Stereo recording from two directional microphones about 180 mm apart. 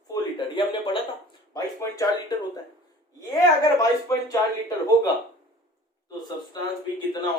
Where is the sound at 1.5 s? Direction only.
15° left (ahead or behind).